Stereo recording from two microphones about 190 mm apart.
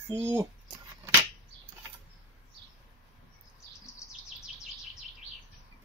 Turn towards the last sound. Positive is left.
turn(degrees=0)  # may be behind; listen again after turning